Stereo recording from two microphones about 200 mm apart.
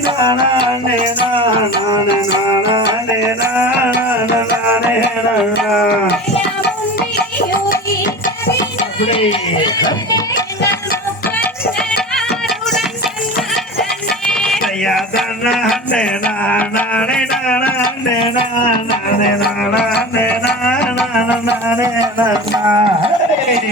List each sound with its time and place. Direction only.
3.2 s music: 10° right (ahead or behind)
5.5 s music: 50° left (ahead or behind)
9.0 s speech: 25° left (ahead or behind)
14.3 s a sound: 5° left (ahead or behind)
19.4 s music: 55° left (ahead or behind)
20.8 s music: 5° right (ahead or behind)
21.8 s speech: 15° right (ahead or behind)